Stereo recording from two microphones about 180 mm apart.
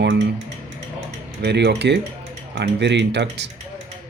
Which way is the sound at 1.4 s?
65° right (ahead or behind).